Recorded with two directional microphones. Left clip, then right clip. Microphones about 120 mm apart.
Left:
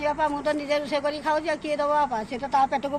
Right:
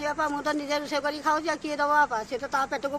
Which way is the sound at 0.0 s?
50° right (ahead or behind).